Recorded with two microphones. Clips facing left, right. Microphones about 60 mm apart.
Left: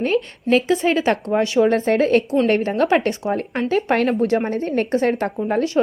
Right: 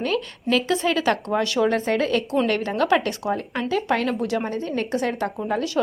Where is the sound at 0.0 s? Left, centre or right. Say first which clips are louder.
Left 4 dB; left.